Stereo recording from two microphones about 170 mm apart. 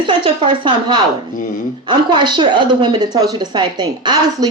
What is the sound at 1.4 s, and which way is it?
Speech, 50° left (ahead or behind).